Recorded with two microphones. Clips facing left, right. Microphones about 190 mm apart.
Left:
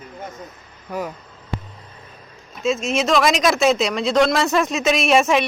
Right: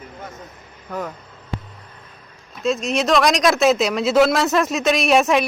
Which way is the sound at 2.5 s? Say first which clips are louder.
Even; centre (ahead or behind).